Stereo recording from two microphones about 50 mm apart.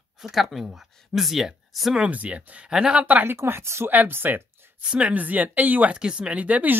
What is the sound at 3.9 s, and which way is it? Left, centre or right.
Speech, right.